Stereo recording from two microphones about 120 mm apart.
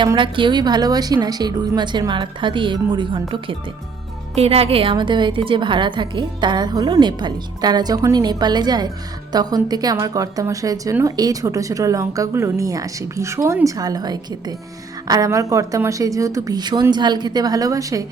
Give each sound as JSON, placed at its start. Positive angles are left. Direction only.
{"t": 0.2, "sound": "a woman's voice", "side_deg": -45}
{"t": 4.4, "sound": "a woman's voice", "side_deg": -55}